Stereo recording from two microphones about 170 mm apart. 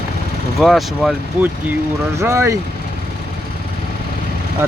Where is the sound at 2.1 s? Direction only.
15° right (ahead or behind).